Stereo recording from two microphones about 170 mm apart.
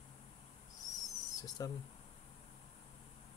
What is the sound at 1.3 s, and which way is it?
Speech, 20° left (ahead or behind).